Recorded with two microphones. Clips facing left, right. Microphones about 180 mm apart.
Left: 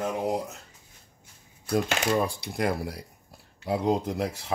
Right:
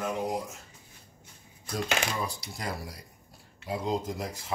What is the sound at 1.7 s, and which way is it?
Speech, 60° left (ahead or behind).